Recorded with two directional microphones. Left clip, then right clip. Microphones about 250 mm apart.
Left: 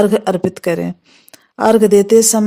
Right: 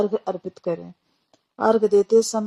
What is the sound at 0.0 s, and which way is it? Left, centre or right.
A woman's voice, left.